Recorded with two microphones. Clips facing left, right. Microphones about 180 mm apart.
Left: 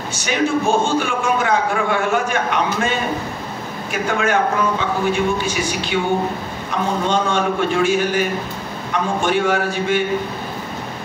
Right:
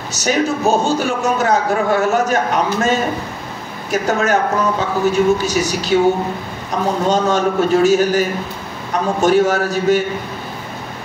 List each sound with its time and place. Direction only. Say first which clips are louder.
0.1 s a man's voice: right 2 dB; 40° right (ahead or behind)
7.1 s a man's voice: right 4 dB; 40° right (ahead or behind)